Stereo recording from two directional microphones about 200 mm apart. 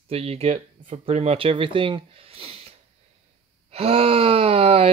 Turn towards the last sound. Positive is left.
turn(degrees=-30)  # may be behind; listen again after turning